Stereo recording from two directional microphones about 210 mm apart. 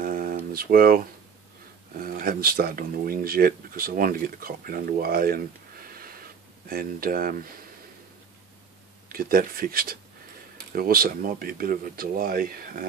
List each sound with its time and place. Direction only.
0.0 s a sound: 40° right (ahead or behind)
0.5 s speech: 45° right (ahead or behind)
9.1 s speech: 45° right (ahead or behind)